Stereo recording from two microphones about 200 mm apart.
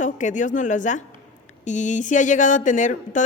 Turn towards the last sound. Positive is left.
turn(degrees=40)  # may be behind; listen again after turning